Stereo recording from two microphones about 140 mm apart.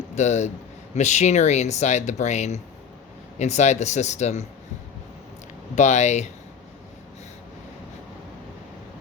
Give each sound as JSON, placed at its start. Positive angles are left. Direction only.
{"t": 0.2, "sound": "speech", "side_deg": 55}
{"t": 5.7, "sound": "speech", "side_deg": 55}